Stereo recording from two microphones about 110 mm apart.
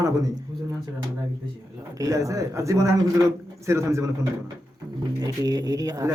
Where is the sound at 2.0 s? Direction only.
30° right (ahead or behind).